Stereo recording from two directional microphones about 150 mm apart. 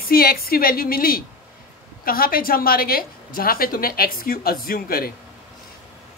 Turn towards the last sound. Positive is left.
turn(degrees=80)